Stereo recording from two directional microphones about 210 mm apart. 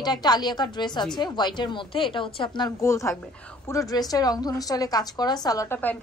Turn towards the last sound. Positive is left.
turn(degrees=10)  # may be behind; listen again after turning